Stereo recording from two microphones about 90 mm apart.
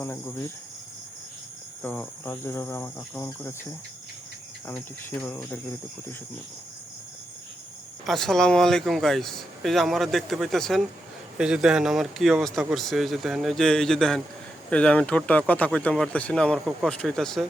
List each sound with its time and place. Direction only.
0.0 s cricket: 25° left (ahead or behind)
1.8 s cricket: 20° left (ahead or behind)
8.0 s speech: 5° left (ahead or behind)
14.7 s speech: 15° left (ahead or behind)